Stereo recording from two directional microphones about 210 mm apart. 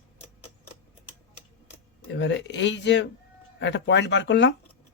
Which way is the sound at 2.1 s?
55° left (ahead or behind).